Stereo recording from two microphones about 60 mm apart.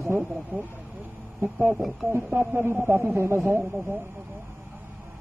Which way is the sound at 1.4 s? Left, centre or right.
Centre.